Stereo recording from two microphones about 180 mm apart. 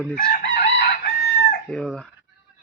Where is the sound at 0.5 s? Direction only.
60° left (ahead or behind).